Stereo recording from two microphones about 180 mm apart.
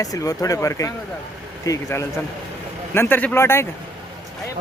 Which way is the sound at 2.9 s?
10° left (ahead or behind).